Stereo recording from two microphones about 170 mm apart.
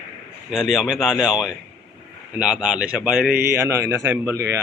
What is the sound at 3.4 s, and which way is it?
A man's voice, 15° right (ahead or behind).